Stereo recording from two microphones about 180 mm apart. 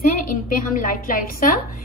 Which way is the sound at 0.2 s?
50° left (ahead or behind).